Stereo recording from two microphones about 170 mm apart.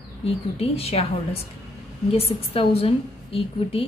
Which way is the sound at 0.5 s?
35° left (ahead or behind).